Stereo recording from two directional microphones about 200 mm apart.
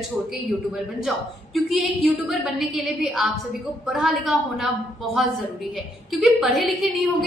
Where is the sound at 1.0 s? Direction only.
Centre (ahead or behind).